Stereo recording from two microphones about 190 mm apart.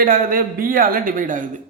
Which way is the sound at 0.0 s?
50° right (ahead or behind).